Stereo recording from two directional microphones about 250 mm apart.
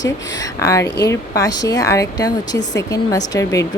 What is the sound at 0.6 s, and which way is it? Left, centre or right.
A woman's voice, centre.